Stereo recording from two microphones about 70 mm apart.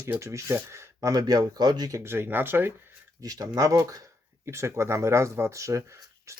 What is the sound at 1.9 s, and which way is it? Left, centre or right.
Speech, right.